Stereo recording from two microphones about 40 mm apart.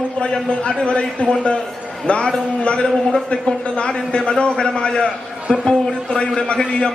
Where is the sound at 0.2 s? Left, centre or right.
Left.